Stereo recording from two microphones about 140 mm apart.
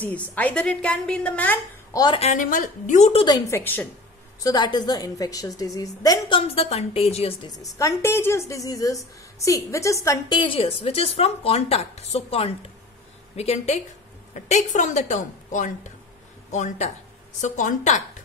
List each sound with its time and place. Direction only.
0.0 s a woman's voice: 10° left (ahead or behind)
1.9 s a woman's voice: 25° left (ahead or behind)
2.3 s a woman's voice: 75° left (ahead or behind)
3.1 s a woman's voice: 35° left (ahead or behind)
3.5 s a woman's voice: 15° left (ahead or behind)
4.4 s a woman's voice: 30° left (ahead or behind); by 7.3 s 45° left (ahead or behind)
7.4 s a woman's voice: 25° left (ahead or behind)
10.3 s a woman's voice: 40° left (ahead or behind)
14.3 s a woman's voice: 60° left (ahead or behind)